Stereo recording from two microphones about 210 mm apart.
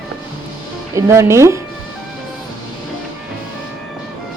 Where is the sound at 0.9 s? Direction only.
15° right (ahead or behind).